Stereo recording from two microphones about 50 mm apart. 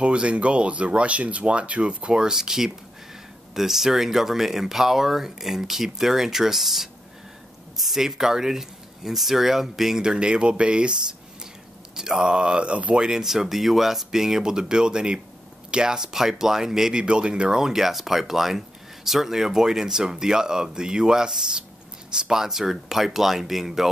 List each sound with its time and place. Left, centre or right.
0.0 s speech: right
13.0 s speech: centre